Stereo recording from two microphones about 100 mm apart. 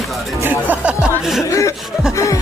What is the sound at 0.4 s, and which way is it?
Speech, 20° right (ahead or behind).